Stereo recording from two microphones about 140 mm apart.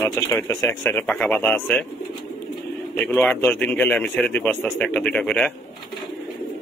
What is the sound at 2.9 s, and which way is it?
A man's voice, 10° left (ahead or behind).